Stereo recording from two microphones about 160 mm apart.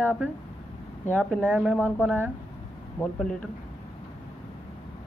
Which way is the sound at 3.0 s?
5° left (ahead or behind).